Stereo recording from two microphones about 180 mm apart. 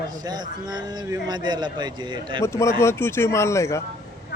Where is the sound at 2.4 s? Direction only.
15° left (ahead or behind).